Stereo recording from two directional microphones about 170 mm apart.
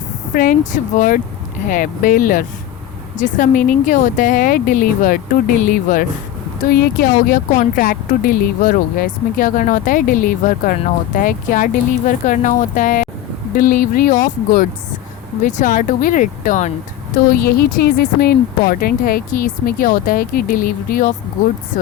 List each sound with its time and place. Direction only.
0.3 s speech: 50° left (ahead or behind)
17.3 s speech: 60° left (ahead or behind)